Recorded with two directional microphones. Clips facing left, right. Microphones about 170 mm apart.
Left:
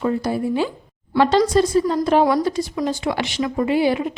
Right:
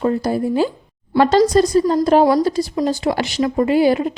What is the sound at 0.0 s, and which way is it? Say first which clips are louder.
Speech: right 3 dB; 40° right (ahead or behind).